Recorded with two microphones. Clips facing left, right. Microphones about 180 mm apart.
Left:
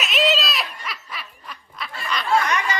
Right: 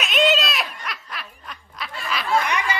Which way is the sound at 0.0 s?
Centre (ahead or behind).